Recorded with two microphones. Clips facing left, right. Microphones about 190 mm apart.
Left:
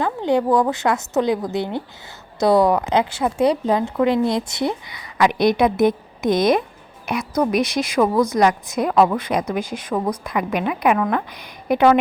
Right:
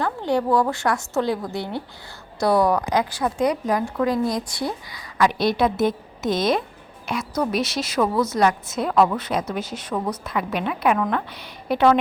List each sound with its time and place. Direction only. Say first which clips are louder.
0.0 s a woman's voice: left 3 dB; 20° left (ahead or behind)